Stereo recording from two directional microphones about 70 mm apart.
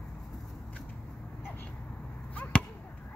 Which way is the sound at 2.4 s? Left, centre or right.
Centre.